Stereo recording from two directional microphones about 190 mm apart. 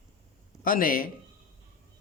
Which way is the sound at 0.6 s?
45° left (ahead or behind).